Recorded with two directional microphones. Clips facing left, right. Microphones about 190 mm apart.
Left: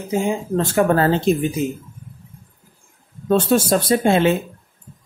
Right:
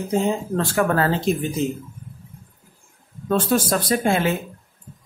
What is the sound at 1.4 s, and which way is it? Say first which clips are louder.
Speech: left 2 dB; 10° left (ahead or behind).